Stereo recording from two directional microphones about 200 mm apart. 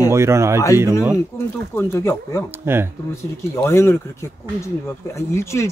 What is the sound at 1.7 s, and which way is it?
Speech, 15° left (ahead or behind).